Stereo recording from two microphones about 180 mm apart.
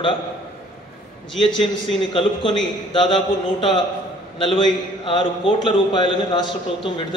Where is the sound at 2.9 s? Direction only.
25° left (ahead or behind).